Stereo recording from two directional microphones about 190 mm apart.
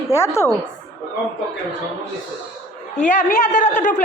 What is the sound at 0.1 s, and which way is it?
Speech, 15° left (ahead or behind).